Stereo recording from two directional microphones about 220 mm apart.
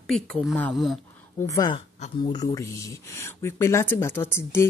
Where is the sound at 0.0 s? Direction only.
Centre (ahead or behind).